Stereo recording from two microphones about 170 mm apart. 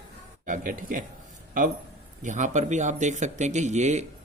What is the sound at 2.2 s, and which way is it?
Speech, 45° right (ahead or behind).